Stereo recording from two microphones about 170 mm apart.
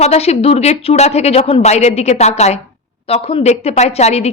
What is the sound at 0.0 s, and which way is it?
A woman's voice, 40° left (ahead or behind).